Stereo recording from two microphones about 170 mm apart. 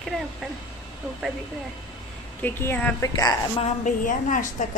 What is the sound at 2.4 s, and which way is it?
A woman's voice, 10° left (ahead or behind).